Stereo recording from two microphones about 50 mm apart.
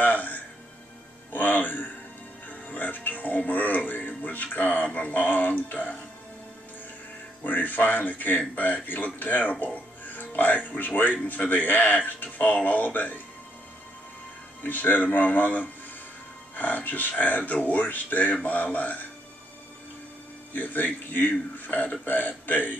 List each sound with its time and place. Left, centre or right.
0.0 s music: left
4.9 s speech: left
7.4 s speech: left
14.6 s speech: left
20.5 s speech: left